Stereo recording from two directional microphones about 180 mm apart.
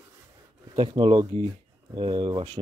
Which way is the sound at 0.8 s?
30° right (ahead or behind).